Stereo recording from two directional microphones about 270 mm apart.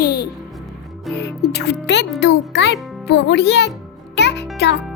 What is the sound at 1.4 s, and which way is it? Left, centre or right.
A child's voice, left.